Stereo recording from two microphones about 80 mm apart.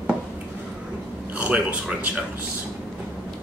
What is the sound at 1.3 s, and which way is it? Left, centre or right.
Speech, centre.